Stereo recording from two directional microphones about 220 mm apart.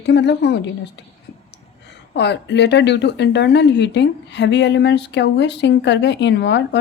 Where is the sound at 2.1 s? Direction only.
50° left (ahead or behind).